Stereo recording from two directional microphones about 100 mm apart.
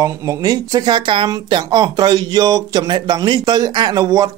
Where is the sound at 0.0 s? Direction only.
35° right (ahead or behind).